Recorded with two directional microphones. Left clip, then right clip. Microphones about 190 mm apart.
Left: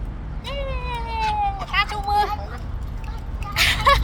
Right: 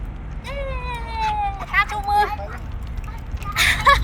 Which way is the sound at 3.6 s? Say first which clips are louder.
Right 2 dB; 10° left (ahead or behind).